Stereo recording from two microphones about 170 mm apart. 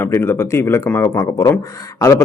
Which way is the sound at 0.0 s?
15° left (ahead or behind).